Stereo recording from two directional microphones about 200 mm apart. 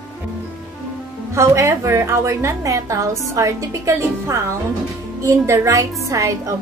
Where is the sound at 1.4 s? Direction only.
15° right (ahead or behind).